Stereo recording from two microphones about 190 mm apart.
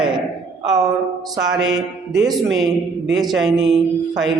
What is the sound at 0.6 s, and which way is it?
Speech, 20° right (ahead or behind).